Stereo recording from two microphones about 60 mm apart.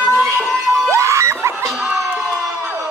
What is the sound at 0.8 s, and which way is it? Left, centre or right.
Screaming, right.